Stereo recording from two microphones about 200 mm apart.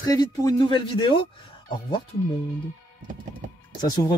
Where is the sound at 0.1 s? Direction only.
20° left (ahead or behind).